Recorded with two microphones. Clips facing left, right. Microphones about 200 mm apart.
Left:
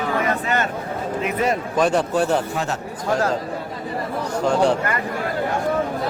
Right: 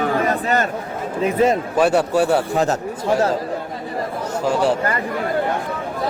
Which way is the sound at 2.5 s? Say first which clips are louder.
Right 6 dB; 40° right (ahead or behind).